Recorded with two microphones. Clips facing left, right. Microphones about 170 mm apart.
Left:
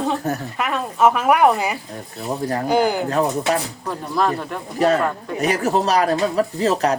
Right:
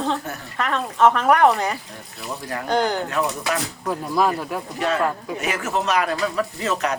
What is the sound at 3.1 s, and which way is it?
Speech, 35° left (ahead or behind).